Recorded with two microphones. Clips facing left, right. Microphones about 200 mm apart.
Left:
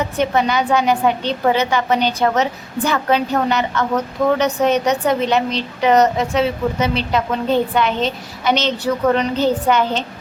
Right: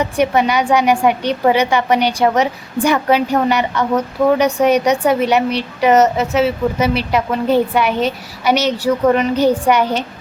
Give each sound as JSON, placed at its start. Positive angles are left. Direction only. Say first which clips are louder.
{"t": 0.2, "sound": "a woman's voice", "louder": "right 2 dB", "side_deg": -10}